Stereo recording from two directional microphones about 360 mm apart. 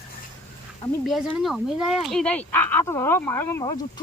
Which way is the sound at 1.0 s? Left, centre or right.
Centre.